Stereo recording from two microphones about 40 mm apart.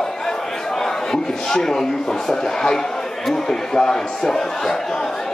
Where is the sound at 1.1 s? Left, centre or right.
Centre.